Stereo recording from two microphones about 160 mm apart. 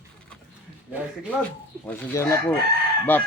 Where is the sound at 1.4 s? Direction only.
10° left (ahead or behind).